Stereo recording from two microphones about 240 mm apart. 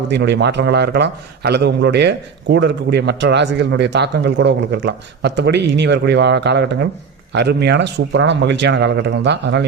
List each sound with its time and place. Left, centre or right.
0.1 s a man's voice: right